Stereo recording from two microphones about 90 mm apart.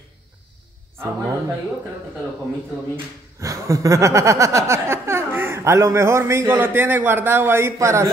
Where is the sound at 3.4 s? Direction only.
40° right (ahead or behind).